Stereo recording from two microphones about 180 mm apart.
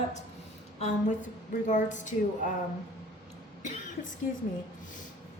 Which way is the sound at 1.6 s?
45° left (ahead or behind).